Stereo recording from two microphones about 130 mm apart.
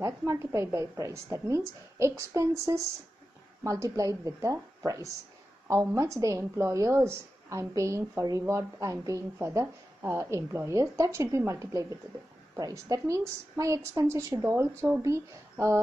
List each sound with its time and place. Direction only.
0.0 s a woman's voice: 25° right (ahead or behind)